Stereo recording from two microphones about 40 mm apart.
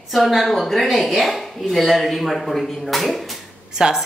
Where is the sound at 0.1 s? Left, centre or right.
Centre.